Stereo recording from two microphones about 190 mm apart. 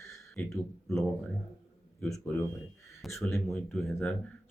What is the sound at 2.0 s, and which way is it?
Speech, 15° left (ahead or behind).